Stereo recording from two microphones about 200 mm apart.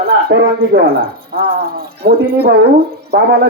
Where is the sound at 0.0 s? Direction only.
55° right (ahead or behind).